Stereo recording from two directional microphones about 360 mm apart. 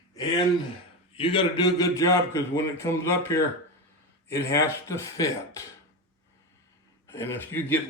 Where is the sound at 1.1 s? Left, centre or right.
Centre.